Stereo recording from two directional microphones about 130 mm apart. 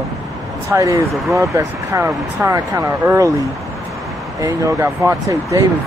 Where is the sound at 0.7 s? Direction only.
20° right (ahead or behind).